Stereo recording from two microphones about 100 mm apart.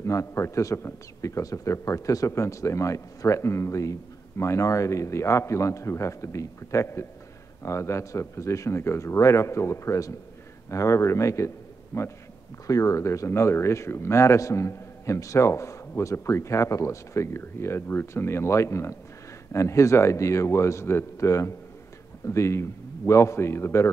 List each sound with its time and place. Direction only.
0.0 s a man's voice: 30° left (ahead or behind)